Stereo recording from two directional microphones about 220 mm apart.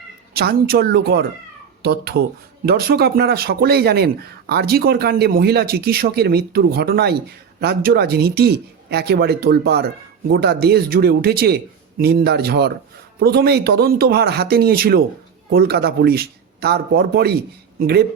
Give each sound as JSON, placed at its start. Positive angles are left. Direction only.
{"t": 0.3, "sound": "speech", "side_deg": -45}